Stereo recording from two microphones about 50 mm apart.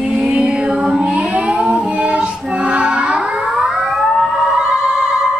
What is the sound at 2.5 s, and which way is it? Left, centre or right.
Child singing, right.